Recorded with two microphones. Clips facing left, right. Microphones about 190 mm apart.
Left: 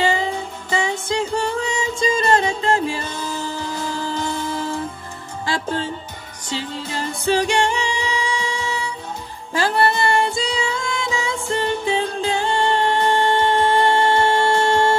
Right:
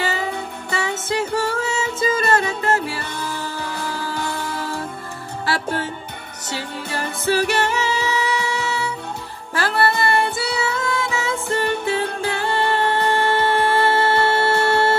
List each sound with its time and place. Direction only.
0.0 s music: 15° left (ahead or behind)
6.5 s music: 20° left (ahead or behind)